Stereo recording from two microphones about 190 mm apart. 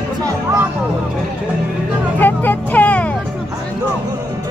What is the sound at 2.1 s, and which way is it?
Vehicle, 10° left (ahead or behind).